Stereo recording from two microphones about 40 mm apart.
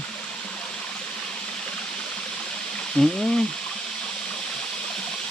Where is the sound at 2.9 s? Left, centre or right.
Centre.